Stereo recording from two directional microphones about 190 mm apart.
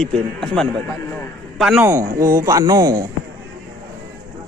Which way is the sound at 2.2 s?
15° right (ahead or behind).